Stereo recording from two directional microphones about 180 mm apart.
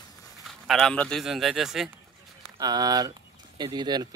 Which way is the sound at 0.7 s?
5° left (ahead or behind).